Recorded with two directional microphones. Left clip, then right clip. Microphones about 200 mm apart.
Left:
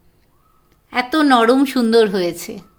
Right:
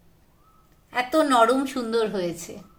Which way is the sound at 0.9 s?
55° left (ahead or behind).